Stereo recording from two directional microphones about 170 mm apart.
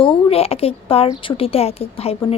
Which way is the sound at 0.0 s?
35° left (ahead or behind).